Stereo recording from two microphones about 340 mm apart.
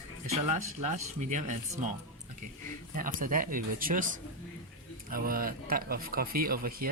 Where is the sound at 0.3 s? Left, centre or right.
Centre.